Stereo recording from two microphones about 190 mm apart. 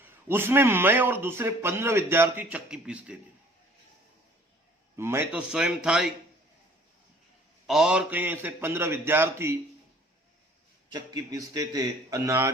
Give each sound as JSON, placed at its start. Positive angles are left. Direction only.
{"t": 0.3, "sound": "a man's voice", "side_deg": -10}
{"t": 4.9, "sound": "speech", "side_deg": -15}
{"t": 7.7, "sound": "a man's voice", "side_deg": -5}
{"t": 10.9, "sound": "a man's voice", "side_deg": -20}